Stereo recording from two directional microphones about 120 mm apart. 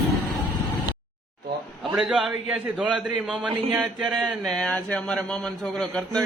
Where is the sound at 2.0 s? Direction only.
Centre (ahead or behind).